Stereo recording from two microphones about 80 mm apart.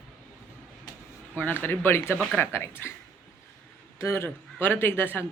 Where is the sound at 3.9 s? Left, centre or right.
Left.